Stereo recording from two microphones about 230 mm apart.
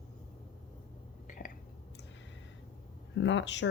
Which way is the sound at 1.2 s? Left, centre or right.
Left.